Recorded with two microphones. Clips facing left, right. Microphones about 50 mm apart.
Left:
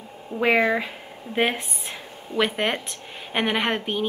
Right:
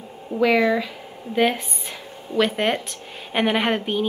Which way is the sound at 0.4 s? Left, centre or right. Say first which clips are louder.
Right 2 dB; left.